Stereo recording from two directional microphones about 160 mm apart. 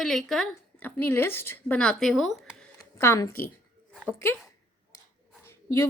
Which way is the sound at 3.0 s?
20° left (ahead or behind).